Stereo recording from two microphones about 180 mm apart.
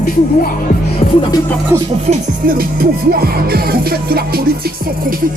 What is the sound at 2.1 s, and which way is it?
Music, 55° right (ahead or behind).